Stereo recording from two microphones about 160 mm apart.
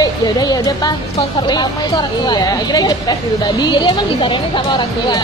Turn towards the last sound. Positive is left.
turn(degrees=25)  # may be behind; listen again after turning